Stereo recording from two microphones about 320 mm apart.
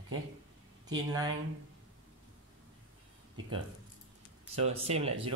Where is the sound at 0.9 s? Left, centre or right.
Centre.